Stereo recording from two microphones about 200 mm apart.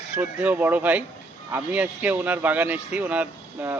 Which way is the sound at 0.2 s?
10° right (ahead or behind).